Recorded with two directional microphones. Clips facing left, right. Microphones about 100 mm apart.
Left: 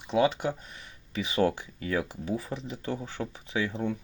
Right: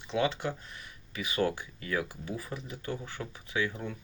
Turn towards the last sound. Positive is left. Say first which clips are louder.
# left 3 dB
turn(degrees=20)  # may be behind; listen again after turning